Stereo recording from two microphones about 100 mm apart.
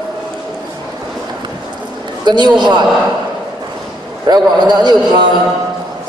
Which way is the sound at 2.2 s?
45° right (ahead or behind).